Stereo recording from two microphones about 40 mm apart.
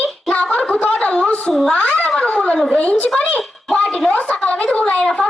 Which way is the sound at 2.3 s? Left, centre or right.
Left.